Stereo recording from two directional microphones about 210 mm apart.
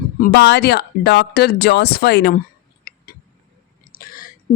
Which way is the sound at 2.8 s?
45° left (ahead or behind).